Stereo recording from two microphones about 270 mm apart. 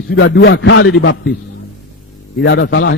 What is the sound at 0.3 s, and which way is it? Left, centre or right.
Speech, left.